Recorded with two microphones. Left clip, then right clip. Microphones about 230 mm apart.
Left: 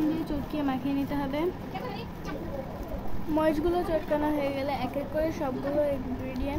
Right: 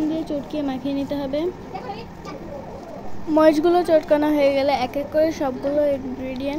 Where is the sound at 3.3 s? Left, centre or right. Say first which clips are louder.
Right 11 dB; right.